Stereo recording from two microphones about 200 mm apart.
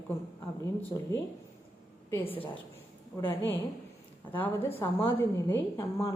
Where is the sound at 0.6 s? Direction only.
10° left (ahead or behind).